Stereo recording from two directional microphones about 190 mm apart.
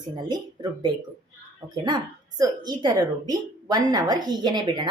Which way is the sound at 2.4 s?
20° right (ahead or behind).